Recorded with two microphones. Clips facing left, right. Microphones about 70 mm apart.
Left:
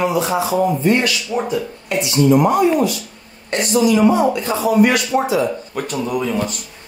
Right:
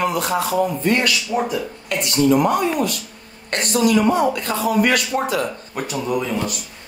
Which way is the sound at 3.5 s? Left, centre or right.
Right.